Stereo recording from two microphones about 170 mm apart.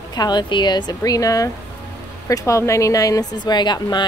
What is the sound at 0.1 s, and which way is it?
Speech, 25° left (ahead or behind).